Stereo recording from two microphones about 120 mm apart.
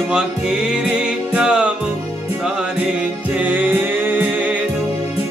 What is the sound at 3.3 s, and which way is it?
Music, 15° right (ahead or behind).